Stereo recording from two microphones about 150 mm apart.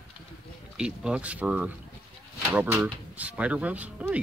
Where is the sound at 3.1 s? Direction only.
10° right (ahead or behind).